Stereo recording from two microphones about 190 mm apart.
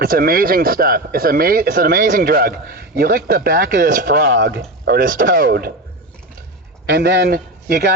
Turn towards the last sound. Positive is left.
turn(degrees=-55)  # may be behind; listen again after turning